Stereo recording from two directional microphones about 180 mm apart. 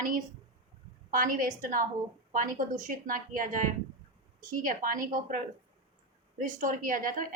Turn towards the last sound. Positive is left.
turn(degrees=-50)  # may be behind; listen again after turning